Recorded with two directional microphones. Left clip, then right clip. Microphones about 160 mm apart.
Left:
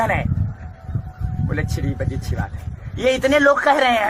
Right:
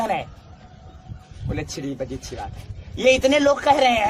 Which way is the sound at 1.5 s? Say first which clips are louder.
Left 1 dB; 20° right (ahead or behind).